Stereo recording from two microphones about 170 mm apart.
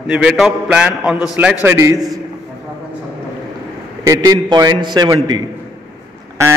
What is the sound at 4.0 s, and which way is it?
A man's voice, 20° right (ahead or behind).